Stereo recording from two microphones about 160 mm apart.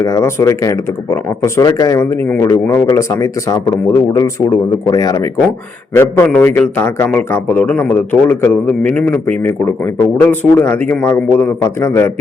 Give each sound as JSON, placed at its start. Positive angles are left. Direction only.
{"t": 0.0, "sound": "a man's voice", "side_deg": 20}